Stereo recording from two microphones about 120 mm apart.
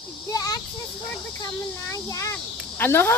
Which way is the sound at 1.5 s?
25° left (ahead or behind).